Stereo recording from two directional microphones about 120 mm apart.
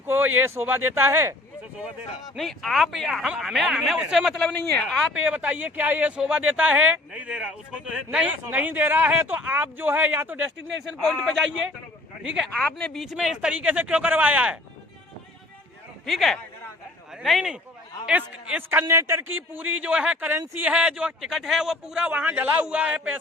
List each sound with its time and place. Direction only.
0.0 s speech: 15° right (ahead or behind)
2.3 s speech: centre (ahead or behind)
5.1 s speech: 10° right (ahead or behind)
11.0 s speech: 5° left (ahead or behind)
12.5 s speech: 10° left (ahead or behind)
13.0 s speech: 5° right (ahead or behind)
16.0 s speech: centre (ahead or behind)